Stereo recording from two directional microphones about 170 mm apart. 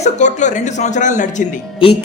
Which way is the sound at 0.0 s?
45° left (ahead or behind).